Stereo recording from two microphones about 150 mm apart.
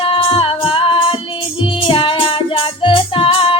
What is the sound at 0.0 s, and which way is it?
Music, 35° left (ahead or behind).